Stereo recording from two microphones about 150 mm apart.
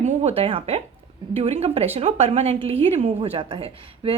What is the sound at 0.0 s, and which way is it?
A woman's voice, 50° right (ahead or behind).